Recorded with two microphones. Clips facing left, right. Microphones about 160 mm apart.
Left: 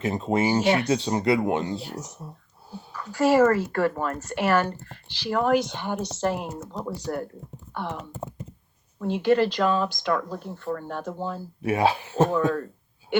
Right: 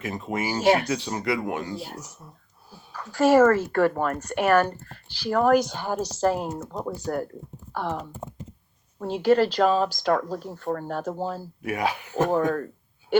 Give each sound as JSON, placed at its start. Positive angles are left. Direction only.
{"t": 0.0, "sound": "speech", "side_deg": 25}
{"t": 0.6, "sound": "speech", "side_deg": -35}
{"t": 0.9, "sound": "speech", "side_deg": 30}
{"t": 3.0, "sound": "speech", "side_deg": -65}
{"t": 11.6, "sound": "speech", "side_deg": 30}